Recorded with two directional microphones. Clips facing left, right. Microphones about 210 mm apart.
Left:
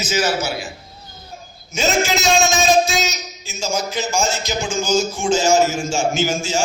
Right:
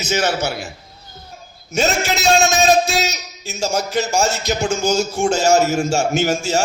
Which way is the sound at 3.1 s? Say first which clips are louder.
Right 1 dB; 65° right (ahead or behind).